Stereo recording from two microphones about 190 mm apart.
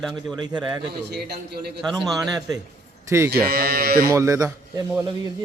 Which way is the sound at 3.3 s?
55° right (ahead or behind).